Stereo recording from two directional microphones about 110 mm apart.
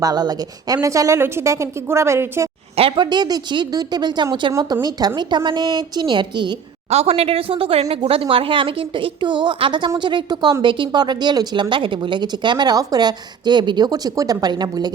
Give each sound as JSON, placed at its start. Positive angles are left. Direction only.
{"t": 0.0, "sound": "a woman's voice", "side_deg": -35}
{"t": 2.9, "sound": "a woman's voice", "side_deg": -40}
{"t": 6.9, "sound": "speech", "side_deg": -75}